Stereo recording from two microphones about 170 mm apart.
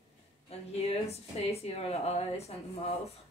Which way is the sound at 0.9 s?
35° left (ahead or behind).